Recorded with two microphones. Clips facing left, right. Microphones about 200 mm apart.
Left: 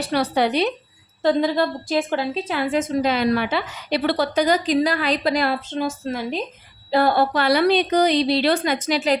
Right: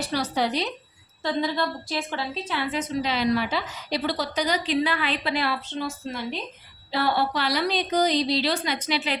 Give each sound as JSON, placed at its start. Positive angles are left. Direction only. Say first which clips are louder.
{"t": 0.0, "sound": "a woman's voice", "louder": "left 5 dB", "side_deg": 60}
{"t": 1.2, "sound": "a woman's voice", "louder": "left 7 dB", "side_deg": 45}